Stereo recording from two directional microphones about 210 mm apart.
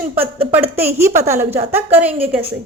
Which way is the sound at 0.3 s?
10° right (ahead or behind).